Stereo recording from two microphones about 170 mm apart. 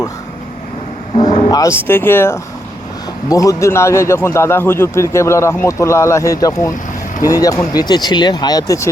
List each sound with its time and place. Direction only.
1.1 s vehicle: 30° left (ahead or behind)
1.9 s a man's voice: 10° left (ahead or behind)